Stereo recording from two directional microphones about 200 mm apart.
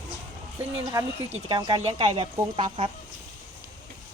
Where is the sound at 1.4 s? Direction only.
20° right (ahead or behind).